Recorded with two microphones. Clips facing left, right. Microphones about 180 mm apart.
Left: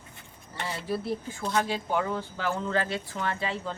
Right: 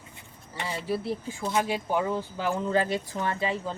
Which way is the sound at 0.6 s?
10° right (ahead or behind).